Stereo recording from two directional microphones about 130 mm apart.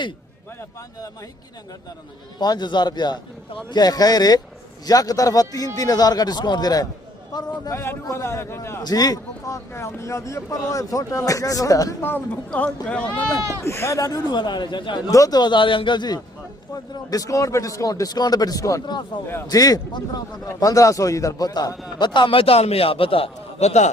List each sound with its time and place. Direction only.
2.4 s a man's voice: 35° left (ahead or behind)
8.8 s speech: 30° left (ahead or behind)
12.0 s speech: 15° left (ahead or behind)
13.7 s a man's voice: 20° left (ahead or behind); by 15.1 s 40° left (ahead or behind)
15.1 s a man's voice: 30° left (ahead or behind); by 23.9 s 60° left (ahead or behind)